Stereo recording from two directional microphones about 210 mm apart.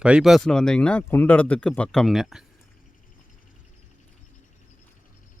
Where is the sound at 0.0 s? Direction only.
5° right (ahead or behind).